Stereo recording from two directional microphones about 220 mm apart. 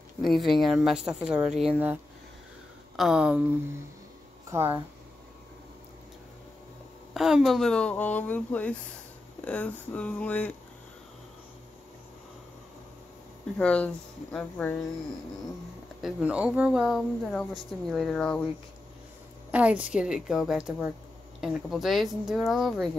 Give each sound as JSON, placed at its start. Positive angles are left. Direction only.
{"t": 0.2, "sound": "speech", "side_deg": 0}
{"t": 3.0, "sound": "speech", "side_deg": -5}
{"t": 4.5, "sound": "speech", "side_deg": -10}
{"t": 7.2, "sound": "speech", "side_deg": 0}
{"t": 13.6, "sound": "speech", "side_deg": 5}
{"t": 16.0, "sound": "speech", "side_deg": -5}
{"t": 19.5, "sound": "speech", "side_deg": -5}